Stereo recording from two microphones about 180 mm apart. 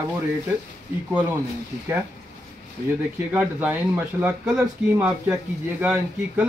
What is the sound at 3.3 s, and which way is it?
Speech, 10° right (ahead or behind).